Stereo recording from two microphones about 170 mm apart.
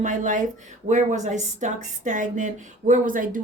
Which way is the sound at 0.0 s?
50° right (ahead or behind).